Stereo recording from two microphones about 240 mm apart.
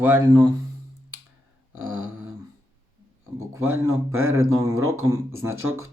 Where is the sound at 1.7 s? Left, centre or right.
Right.